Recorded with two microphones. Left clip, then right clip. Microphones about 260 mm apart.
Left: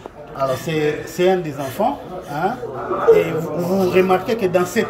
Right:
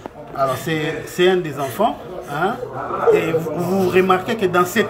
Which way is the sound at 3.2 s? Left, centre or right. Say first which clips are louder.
Left 1 dB; centre.